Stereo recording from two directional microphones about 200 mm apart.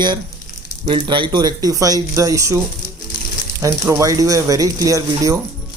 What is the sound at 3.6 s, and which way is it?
A man's voice, 15° right (ahead or behind).